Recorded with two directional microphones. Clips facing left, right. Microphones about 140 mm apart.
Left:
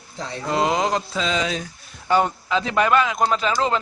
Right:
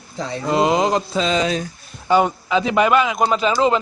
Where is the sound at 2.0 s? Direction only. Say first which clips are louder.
Right 3 dB; 10° right (ahead or behind).